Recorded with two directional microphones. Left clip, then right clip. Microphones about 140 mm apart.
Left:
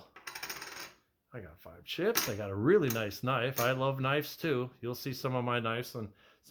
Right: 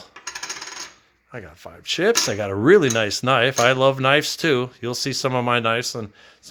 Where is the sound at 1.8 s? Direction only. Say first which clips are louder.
Right 13 dB; 50° right (ahead or behind).